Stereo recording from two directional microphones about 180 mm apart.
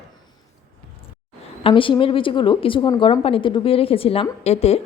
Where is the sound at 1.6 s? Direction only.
30° left (ahead or behind).